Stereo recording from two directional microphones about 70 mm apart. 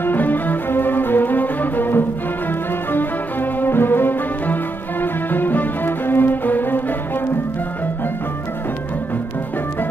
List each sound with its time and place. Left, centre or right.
0.0 s music: left